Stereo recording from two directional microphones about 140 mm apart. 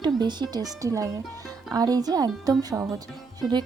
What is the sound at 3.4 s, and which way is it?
Speech, 30° right (ahead or behind).